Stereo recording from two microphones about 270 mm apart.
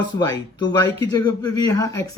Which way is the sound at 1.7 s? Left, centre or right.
Centre.